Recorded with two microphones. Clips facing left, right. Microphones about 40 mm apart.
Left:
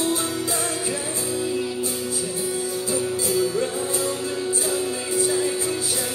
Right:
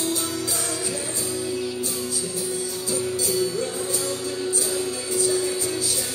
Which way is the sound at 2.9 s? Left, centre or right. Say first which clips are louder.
Left 1 dB; left.